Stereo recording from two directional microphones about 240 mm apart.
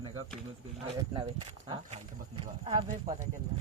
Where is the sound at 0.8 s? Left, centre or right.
Centre.